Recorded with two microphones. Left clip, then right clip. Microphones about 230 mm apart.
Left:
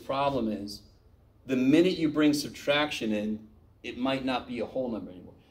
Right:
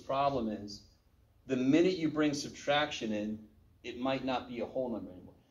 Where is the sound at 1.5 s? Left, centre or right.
Left.